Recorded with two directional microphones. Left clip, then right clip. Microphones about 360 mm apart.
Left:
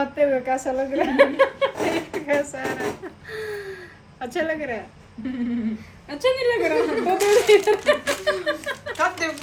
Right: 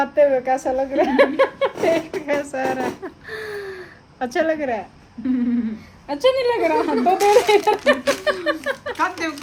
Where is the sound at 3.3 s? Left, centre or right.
Right.